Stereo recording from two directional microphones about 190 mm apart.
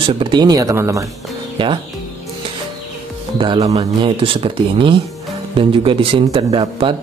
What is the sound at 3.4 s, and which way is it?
Speech, 30° right (ahead or behind).